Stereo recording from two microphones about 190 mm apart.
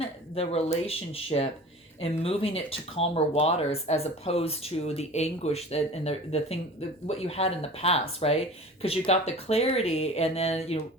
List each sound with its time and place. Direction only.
0.0 s speech: 30° left (ahead or behind)